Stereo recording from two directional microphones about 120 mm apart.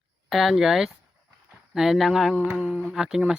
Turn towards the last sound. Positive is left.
turn(degrees=-5)  # may be behind; listen again after turning